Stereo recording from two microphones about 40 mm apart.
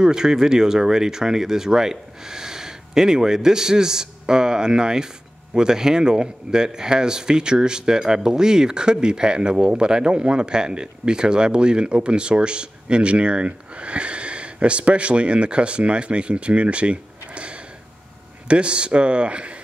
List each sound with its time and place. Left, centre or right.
0.0 s speech: centre